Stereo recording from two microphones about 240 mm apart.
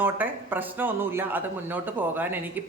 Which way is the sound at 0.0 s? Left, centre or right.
Centre.